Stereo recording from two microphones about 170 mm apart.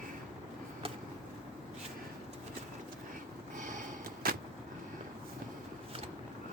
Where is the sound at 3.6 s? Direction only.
50° right (ahead or behind).